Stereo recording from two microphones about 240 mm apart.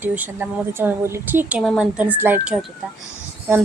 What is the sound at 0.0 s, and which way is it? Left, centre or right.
A woman's voice, centre.